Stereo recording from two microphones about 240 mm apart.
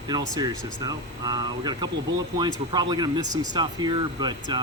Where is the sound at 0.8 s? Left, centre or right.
Centre.